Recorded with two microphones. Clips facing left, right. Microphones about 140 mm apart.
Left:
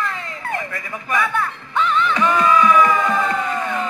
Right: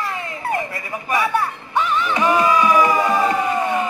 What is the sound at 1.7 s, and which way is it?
Music, 15° right (ahead or behind).